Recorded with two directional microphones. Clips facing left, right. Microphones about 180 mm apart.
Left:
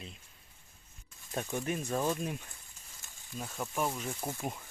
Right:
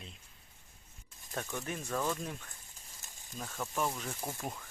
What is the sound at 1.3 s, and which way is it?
Speech, 20° left (ahead or behind).